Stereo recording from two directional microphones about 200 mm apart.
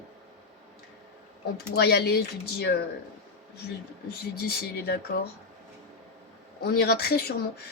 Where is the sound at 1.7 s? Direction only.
55° left (ahead or behind).